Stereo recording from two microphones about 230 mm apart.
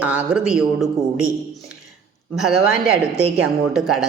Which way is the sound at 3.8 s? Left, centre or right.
Centre.